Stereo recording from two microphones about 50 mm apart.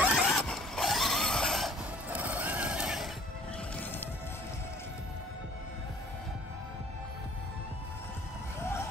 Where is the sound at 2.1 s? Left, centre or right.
Right.